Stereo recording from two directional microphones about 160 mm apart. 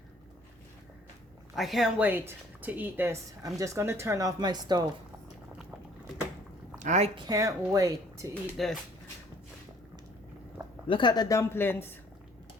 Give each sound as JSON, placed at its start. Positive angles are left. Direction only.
{"t": 1.5, "sound": "a woman's voice", "side_deg": 0}
{"t": 6.7, "sound": "speech", "side_deg": -50}
{"t": 7.3, "sound": "speech", "side_deg": -20}
{"t": 8.3, "sound": "speech", "side_deg": 0}
{"t": 10.8, "sound": "speech", "side_deg": 30}